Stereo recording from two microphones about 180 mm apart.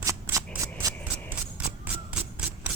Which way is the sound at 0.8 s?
20° right (ahead or behind).